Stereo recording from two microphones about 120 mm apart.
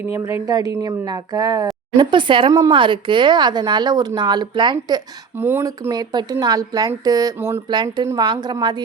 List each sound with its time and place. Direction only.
0.0 s a woman's voice: 25° right (ahead or behind)
5.4 s speech: 20° right (ahead or behind)
5.9 s a woman's voice: 35° right (ahead or behind)
7.3 s a woman's voice: 20° right (ahead or behind)
7.7 s a woman's voice: 35° right (ahead or behind)